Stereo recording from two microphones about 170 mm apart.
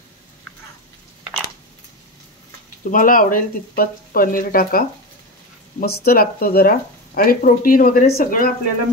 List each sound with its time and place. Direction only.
2.8 s speech: 55° left (ahead or behind)